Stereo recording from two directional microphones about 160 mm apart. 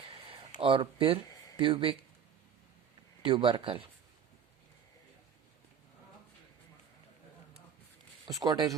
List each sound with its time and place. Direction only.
0.6 s speech: 35° right (ahead or behind)
3.2 s speech: 30° right (ahead or behind)
8.4 s speech: 20° right (ahead or behind)